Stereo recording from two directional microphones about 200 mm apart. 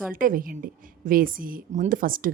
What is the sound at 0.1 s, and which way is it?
A woman's voice, 45° right (ahead or behind).